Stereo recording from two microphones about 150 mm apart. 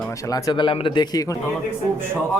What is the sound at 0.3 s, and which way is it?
Speech, 25° left (ahead or behind).